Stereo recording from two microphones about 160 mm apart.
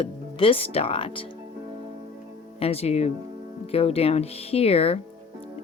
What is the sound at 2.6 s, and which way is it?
Speech, 40° left (ahead or behind).